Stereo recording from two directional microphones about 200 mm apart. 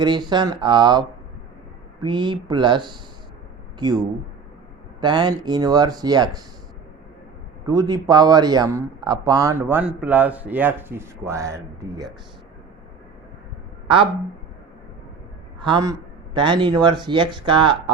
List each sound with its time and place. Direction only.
0.0 s speech: 20° right (ahead or behind)
7.7 s speech: 20° right (ahead or behind)
13.8 s speech: 25° right (ahead or behind)
15.6 s speech: 20° right (ahead or behind)